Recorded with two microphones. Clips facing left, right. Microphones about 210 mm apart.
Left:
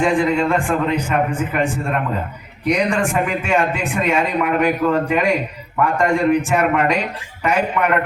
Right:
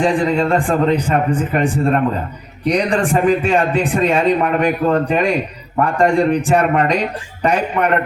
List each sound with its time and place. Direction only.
0.0 s a man's voice: 35° right (ahead or behind)